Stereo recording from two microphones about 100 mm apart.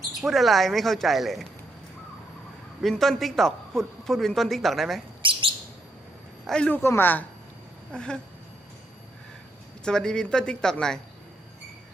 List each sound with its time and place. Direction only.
0.2 s speech: centre (ahead or behind)
2.8 s speech: centre (ahead or behind)
5.2 s chirp: 60° right (ahead or behind)
6.5 s speech: 10° left (ahead or behind)
7.9 s speech: 10° left (ahead or behind)
9.8 s speech: 5° left (ahead or behind)